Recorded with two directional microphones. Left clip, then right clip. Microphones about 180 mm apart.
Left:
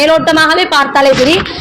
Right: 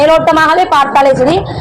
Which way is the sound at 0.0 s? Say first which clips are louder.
Right 1 dB; 35° left (ahead or behind).